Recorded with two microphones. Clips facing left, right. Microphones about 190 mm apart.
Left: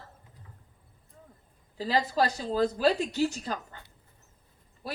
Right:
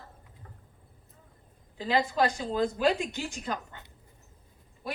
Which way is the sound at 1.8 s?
35° left (ahead or behind).